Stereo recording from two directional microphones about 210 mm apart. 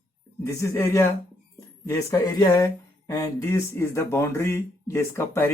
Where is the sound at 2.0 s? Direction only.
15° left (ahead or behind).